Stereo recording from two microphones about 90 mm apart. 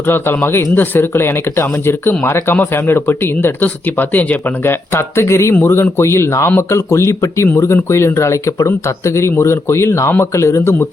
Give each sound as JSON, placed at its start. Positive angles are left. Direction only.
{"t": 0.0, "sound": "speech", "side_deg": 25}